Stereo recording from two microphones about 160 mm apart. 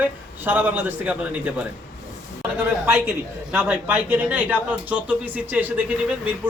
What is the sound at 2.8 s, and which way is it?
Speech, 10° right (ahead or behind).